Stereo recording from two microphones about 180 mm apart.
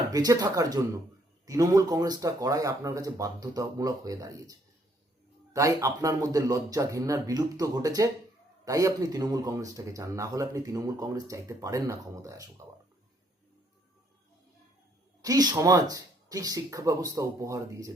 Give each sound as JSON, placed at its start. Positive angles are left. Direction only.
{"t": 0.1, "sound": "speech", "side_deg": -20}
{"t": 5.5, "sound": "speech", "side_deg": -20}
{"t": 15.2, "sound": "speech", "side_deg": -20}